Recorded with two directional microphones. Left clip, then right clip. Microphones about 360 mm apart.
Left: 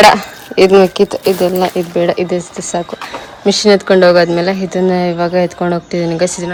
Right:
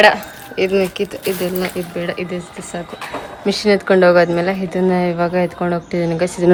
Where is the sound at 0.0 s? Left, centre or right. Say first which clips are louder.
Left 5 dB; centre.